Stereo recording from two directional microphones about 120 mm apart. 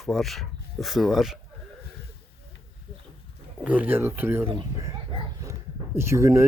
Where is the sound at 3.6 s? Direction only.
15° right (ahead or behind).